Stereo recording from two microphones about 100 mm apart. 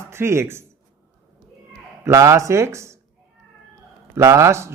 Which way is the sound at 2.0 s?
30° right (ahead or behind).